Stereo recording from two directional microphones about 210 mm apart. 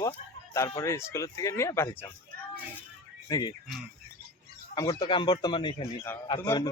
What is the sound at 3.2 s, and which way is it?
Speech, 20° left (ahead or behind).